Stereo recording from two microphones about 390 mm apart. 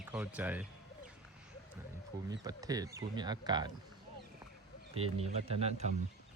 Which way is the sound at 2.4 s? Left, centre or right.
Centre.